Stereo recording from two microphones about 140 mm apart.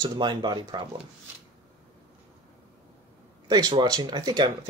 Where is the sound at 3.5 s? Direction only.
30° right (ahead or behind).